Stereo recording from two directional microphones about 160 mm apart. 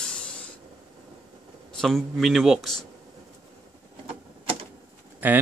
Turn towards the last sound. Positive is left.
turn(degrees=-10)  # may be behind; listen again after turning